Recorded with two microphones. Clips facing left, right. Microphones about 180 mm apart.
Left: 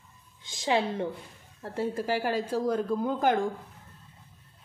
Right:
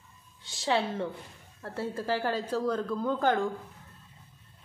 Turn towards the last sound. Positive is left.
turn(degrees=15)  # may be behind; listen again after turning